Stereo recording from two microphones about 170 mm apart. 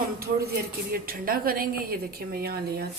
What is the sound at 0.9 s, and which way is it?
A woman's voice, 60° right (ahead or behind).